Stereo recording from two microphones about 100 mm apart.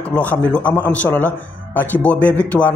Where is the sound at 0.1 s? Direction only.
15° left (ahead or behind).